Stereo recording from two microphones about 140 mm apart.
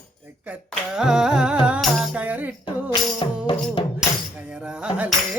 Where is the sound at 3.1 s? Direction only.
35° left (ahead or behind).